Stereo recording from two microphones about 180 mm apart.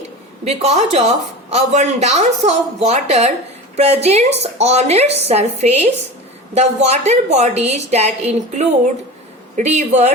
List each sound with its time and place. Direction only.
0.4 s speech: 35° right (ahead or behind)